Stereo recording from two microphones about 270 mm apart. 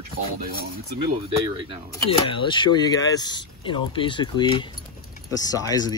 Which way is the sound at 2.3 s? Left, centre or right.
Centre.